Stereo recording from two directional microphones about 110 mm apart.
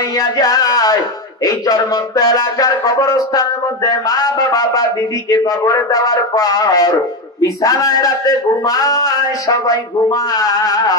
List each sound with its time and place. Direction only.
0.1 s music: 35° left (ahead or behind)
1.4 s speech: 35° left (ahead or behind)